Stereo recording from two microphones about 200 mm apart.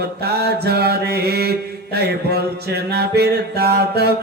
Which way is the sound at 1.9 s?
55° right (ahead or behind).